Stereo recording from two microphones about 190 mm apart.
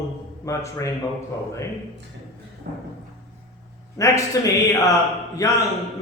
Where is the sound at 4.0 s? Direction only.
15° left (ahead or behind).